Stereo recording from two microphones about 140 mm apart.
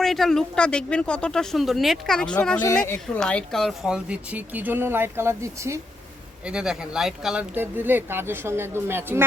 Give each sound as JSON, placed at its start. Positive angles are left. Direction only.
{"t": 0.0, "sound": "speech", "side_deg": 0}
{"t": 6.4, "sound": "speech", "side_deg": -5}
{"t": 7.5, "sound": "speech", "side_deg": -15}